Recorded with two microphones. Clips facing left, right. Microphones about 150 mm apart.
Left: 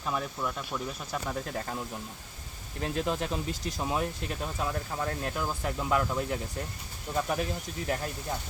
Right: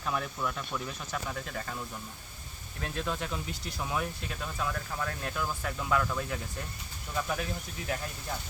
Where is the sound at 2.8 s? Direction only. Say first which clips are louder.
Left 4 dB; 30° left (ahead or behind).